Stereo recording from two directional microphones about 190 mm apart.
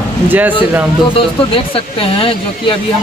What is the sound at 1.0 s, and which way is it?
Speech, 30° left (ahead or behind).